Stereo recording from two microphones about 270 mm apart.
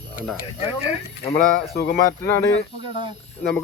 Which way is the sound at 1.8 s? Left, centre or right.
Left.